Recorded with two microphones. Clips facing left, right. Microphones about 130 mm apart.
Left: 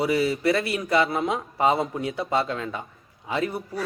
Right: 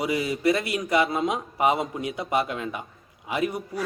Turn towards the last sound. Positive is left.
turn(degrees=-15)  # may be behind; listen again after turning